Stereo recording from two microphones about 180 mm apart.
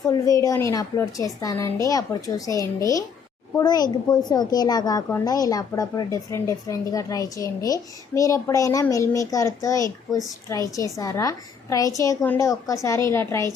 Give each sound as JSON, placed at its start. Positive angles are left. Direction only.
{"t": 0.1, "sound": "a woman's voice", "side_deg": 20}